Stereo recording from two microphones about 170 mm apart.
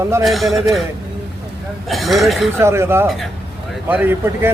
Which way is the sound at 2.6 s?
15° right (ahead or behind).